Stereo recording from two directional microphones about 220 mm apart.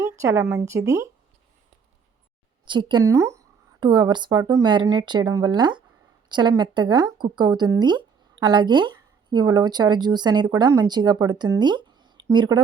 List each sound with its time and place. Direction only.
0.0 s speech: 10° right (ahead or behind)
2.6 s speech: 20° right (ahead or behind)